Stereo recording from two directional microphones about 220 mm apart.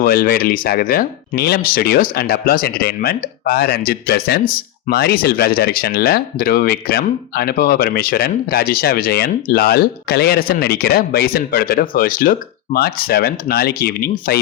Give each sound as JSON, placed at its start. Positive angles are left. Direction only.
{"t": 0.0, "sound": "speech", "side_deg": 40}